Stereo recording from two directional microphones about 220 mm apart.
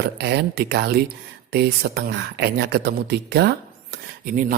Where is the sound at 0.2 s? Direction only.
50° right (ahead or behind).